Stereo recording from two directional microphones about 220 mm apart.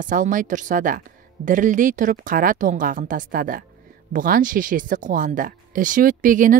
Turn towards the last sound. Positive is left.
turn(degrees=-35)  # may be behind; listen again after turning